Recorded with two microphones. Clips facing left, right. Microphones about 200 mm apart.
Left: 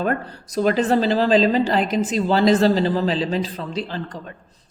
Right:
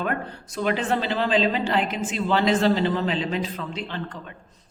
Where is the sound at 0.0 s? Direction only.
35° left (ahead or behind).